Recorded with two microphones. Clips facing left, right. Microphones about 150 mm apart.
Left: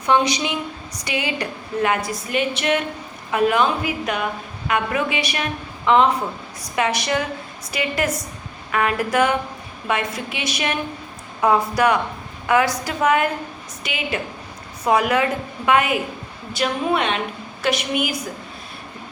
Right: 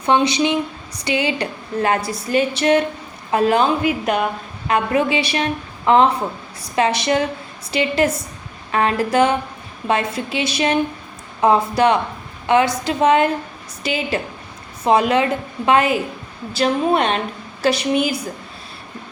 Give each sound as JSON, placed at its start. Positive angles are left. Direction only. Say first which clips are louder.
{"t": 0.0, "sound": "a woman's voice", "louder": "right 3 dB", "side_deg": -25}